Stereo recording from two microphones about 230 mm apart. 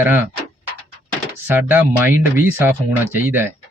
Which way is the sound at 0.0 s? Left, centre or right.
Centre.